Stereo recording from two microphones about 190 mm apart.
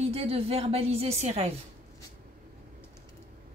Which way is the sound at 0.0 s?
30° right (ahead or behind).